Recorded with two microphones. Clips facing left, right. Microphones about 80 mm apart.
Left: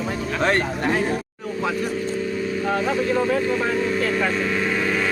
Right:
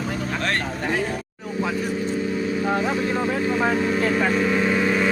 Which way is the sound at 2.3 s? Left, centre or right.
Centre.